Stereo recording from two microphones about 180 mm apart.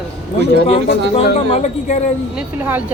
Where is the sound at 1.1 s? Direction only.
35° left (ahead or behind).